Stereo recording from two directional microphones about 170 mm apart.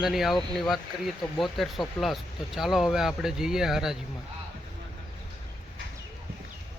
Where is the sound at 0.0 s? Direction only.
Centre (ahead or behind).